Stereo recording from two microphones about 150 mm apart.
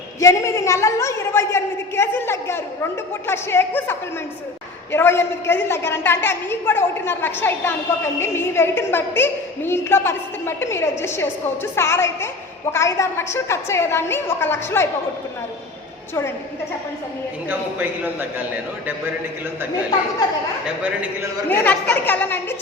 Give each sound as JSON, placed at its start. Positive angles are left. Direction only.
{"t": 0.2, "sound": "a woman's voice", "side_deg": 20}
{"t": 17.5, "sound": "a man's voice", "side_deg": -10}
{"t": 20.8, "sound": "a man's voice", "side_deg": -10}
{"t": 21.5, "sound": "a woman's voice", "side_deg": 10}